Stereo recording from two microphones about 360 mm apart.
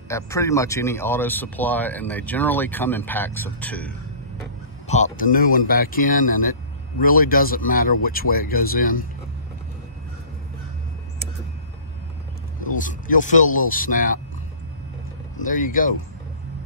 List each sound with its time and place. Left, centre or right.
0.1 s speech: centre
4.8 s speech: centre
12.6 s speech: left
15.4 s speech: left